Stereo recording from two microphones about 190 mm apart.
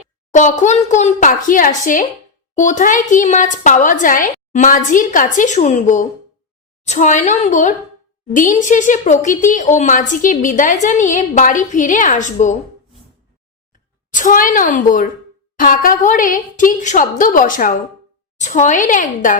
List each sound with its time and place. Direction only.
0.3 s speech: 40° left (ahead or behind)
13.7 s a woman's voice: 45° left (ahead or behind)